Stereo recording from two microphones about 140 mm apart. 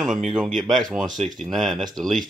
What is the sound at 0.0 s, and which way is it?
Speech, centre (ahead or behind).